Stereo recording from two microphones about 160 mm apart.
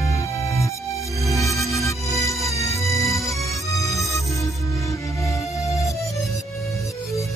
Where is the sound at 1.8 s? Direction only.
20° left (ahead or behind).